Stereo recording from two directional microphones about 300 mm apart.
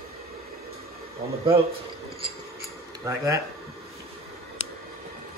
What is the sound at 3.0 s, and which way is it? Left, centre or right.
Speech, centre.